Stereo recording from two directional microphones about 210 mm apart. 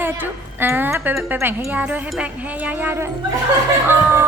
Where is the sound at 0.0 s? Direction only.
10° right (ahead or behind).